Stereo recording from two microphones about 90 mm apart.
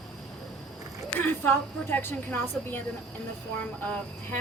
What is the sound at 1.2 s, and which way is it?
A woman's voice, 20° left (ahead or behind).